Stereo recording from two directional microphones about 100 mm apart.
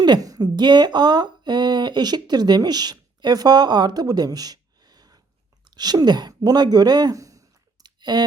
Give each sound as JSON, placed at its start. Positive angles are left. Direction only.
{"t": 0.0, "sound": "speech", "side_deg": -40}